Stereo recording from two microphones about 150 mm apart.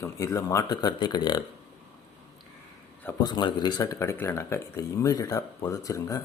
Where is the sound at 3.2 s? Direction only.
30° left (ahead or behind).